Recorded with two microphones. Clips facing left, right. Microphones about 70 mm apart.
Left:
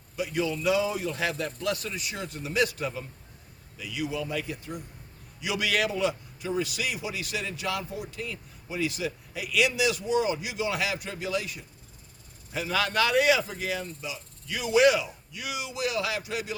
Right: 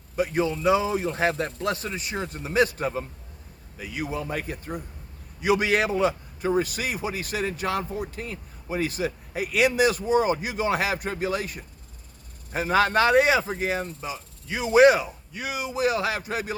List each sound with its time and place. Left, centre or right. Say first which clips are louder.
0.2 s a man's voice: right 5 dB; right